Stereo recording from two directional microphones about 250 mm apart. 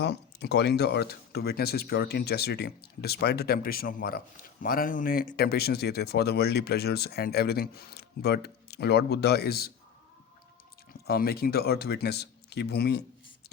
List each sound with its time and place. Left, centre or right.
0.0 s speech: left
11.0 s speech: left